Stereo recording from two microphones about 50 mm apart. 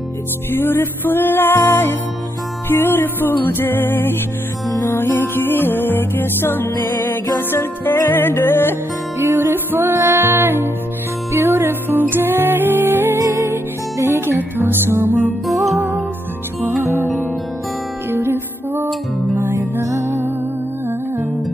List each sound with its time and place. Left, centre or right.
0.6 s music: left
9.2 s music: right
13.2 s music: right
15.0 s music: right
15.4 s music: centre
18.1 s music: right
19.8 s music: right